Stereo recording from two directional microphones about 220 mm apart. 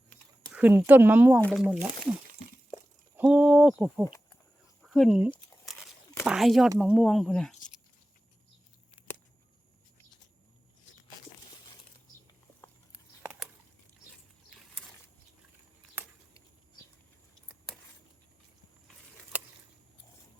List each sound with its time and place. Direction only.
0.5 s speech: 10° right (ahead or behind)
1.4 s speech: 5° left (ahead or behind)
1.6 s speech: 5° right (ahead or behind)
3.2 s speech: 5° right (ahead or behind)
4.0 s a sound: 15° left (ahead or behind)
4.8 s speech: centre (ahead or behind)